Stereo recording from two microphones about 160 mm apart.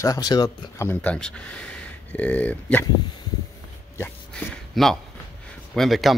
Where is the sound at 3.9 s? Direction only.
15° left (ahead or behind).